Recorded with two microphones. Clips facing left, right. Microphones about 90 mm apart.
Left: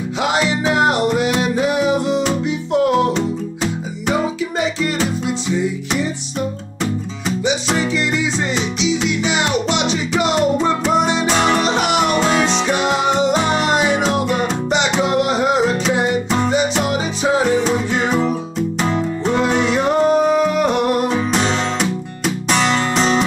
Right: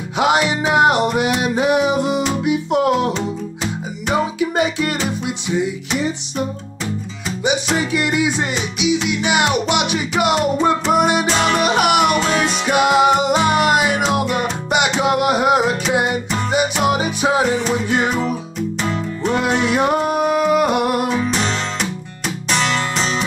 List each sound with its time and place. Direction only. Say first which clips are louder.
0.2 s music: right 2 dB; 15° right (ahead or behind)
4.4 s music: right 2 dB; 15° right (ahead or behind)
7.4 s music: right 1 dB; 15° right (ahead or behind)
12.1 s music: left 1 dB; 35° left (ahead or behind)
12.4 s music: right 1 dB; 10° right (ahead or behind)
19.7 s music: left 2 dB; 10° right (ahead or behind)
22.9 s music: left 5 dB; 35° left (ahead or behind)